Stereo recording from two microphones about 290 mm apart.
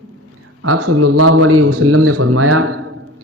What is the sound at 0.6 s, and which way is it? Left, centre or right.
Speech, right.